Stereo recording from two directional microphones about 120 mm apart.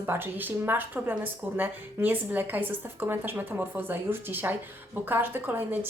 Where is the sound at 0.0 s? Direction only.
15° right (ahead or behind).